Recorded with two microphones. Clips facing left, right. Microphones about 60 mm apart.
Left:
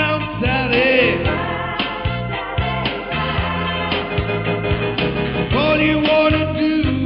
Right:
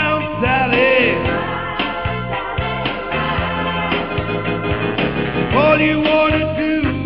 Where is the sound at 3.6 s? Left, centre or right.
Centre.